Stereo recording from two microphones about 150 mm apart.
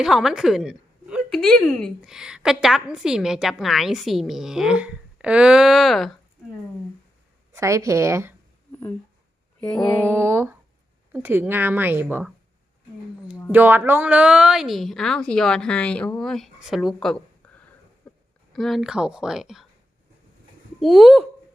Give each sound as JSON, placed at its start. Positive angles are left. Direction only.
{"t": 0.0, "sound": "speech", "side_deg": -5}
{"t": 7.5, "sound": "a woman's voice", "side_deg": -20}
{"t": 9.6, "sound": "a sound", "side_deg": 5}
{"t": 10.0, "sound": "a woman's voice", "side_deg": -15}
{"t": 13.5, "sound": "speech", "side_deg": -15}
{"t": 17.4, "sound": "a sound", "side_deg": 5}
{"t": 18.5, "sound": "speech", "side_deg": 0}
{"t": 20.7, "sound": "speech", "side_deg": 0}